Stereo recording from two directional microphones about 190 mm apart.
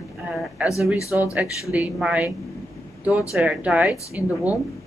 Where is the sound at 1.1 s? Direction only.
5° right (ahead or behind).